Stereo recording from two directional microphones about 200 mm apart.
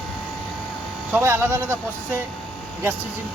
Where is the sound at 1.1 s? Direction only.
10° right (ahead or behind).